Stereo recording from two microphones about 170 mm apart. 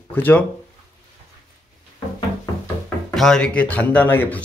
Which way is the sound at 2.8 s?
Centre (ahead or behind).